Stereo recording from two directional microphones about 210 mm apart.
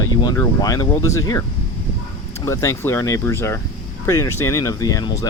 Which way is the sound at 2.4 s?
15° left (ahead or behind).